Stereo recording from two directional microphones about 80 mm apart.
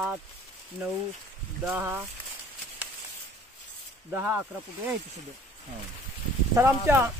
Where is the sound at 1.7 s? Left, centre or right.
Right.